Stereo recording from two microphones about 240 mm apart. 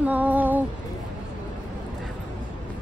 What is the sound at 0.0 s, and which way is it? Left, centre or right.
Female singing, centre.